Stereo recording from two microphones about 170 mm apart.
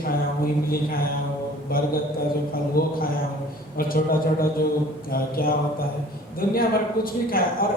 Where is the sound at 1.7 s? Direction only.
60° left (ahead or behind).